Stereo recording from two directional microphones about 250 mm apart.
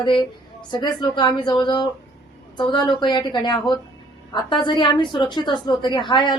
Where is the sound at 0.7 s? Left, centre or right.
Centre.